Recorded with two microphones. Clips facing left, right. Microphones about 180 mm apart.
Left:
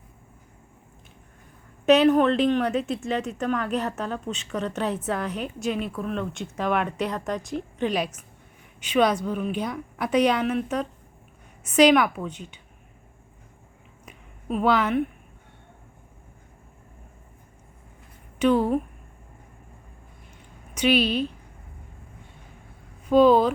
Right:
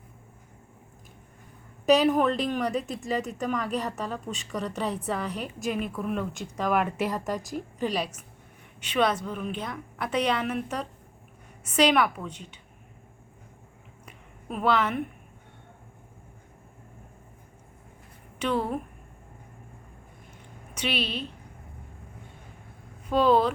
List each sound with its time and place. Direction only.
1.9 s a woman's voice: centre (ahead or behind)
9.2 s a woman's voice: 5° left (ahead or behind)
14.4 s a woman's voice: centre (ahead or behind)
18.4 s a woman's voice: centre (ahead or behind)
20.9 s a woman's voice: 30° right (ahead or behind)
23.0 s a woman's voice: centre (ahead or behind)